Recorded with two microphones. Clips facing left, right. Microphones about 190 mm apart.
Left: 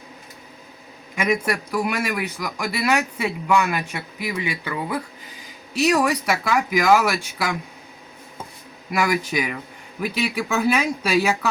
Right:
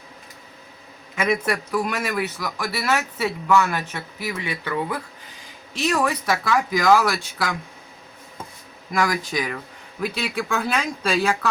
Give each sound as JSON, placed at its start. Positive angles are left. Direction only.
{"t": 1.1, "sound": "a man's voice", "side_deg": 10}
{"t": 8.9, "sound": "a man's voice", "side_deg": 10}